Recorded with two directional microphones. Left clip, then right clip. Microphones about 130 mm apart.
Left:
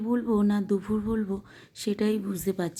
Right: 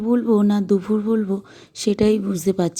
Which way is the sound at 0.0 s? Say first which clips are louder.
Right 8 dB; 35° right (ahead or behind).